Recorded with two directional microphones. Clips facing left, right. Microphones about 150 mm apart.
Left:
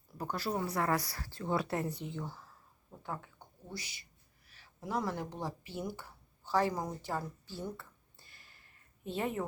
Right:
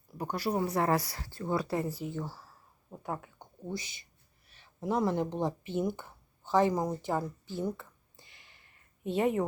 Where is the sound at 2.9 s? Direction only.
20° right (ahead or behind).